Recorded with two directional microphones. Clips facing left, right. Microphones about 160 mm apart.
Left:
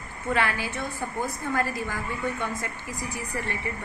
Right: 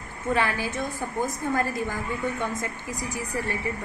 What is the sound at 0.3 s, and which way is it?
A woman's voice, 15° right (ahead or behind).